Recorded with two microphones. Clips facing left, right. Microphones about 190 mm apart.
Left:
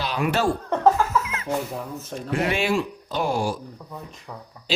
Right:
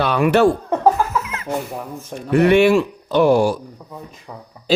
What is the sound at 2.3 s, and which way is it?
Speech, 65° right (ahead or behind).